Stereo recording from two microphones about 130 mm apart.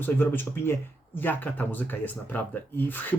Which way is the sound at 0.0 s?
15° left (ahead or behind).